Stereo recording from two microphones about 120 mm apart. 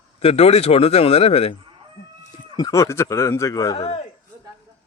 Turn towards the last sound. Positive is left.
turn(degrees=55)  # may be behind; listen again after turning